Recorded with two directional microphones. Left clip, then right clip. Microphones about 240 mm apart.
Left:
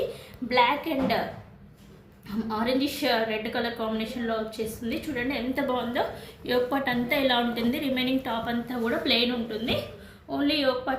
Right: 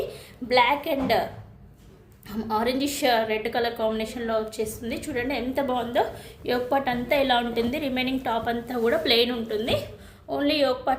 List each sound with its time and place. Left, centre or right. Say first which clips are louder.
0.4 s a woman's voice: right 2 dB; right
2.2 s a woman's voice: right 3 dB; right